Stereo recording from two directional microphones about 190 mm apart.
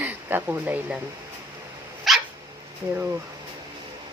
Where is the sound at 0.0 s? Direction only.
10° right (ahead or behind).